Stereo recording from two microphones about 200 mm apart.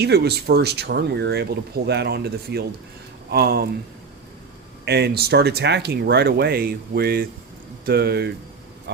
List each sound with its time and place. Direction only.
0.0 s speech: 55° right (ahead or behind)
4.9 s speech: 55° right (ahead or behind)